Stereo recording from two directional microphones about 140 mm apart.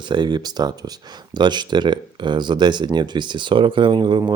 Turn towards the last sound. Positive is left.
turn(degrees=-35)  # may be behind; listen again after turning